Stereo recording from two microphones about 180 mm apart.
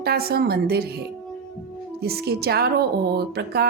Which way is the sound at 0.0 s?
60° right (ahead or behind).